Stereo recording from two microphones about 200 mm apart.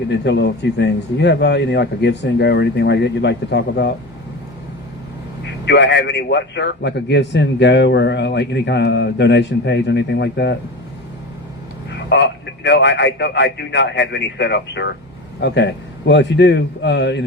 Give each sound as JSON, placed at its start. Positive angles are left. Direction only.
{"t": 0.1, "sound": "a man's voice", "side_deg": 60}
{"t": 5.6, "sound": "a man's voice", "side_deg": 60}
{"t": 11.9, "sound": "a man's voice", "side_deg": 60}